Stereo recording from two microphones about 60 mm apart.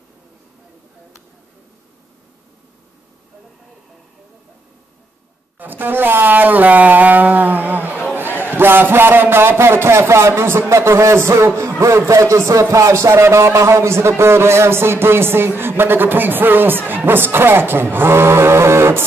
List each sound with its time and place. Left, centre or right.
5.6 s speech: right
7.9 s a sound: left
8.4 s a man's voice: right